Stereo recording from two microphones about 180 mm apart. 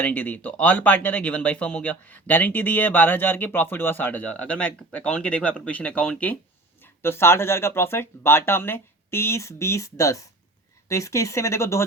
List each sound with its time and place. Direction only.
0.0 s speech: 10° left (ahead or behind)